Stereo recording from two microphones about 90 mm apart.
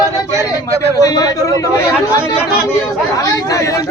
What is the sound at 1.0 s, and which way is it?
Speech, 40° left (ahead or behind).